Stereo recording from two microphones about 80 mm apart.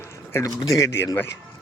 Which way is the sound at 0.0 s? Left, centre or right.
Left.